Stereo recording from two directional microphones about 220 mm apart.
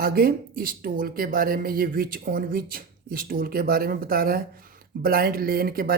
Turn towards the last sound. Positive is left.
turn(degrees=-40)  # may be behind; listen again after turning